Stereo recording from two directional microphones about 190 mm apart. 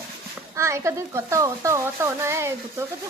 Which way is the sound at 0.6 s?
15° right (ahead or behind).